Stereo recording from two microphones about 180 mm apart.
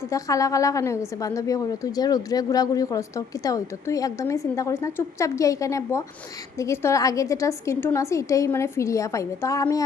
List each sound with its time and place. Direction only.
0.1 s a woman's voice: 20° left (ahead or behind)